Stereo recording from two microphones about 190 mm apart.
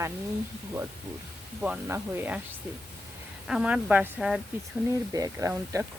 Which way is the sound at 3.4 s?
5° right (ahead or behind).